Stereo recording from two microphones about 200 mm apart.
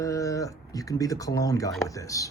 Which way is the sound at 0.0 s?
15° left (ahead or behind).